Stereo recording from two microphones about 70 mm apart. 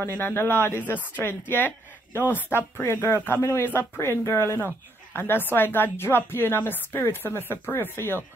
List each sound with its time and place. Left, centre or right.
0.0 s a woman's voice: left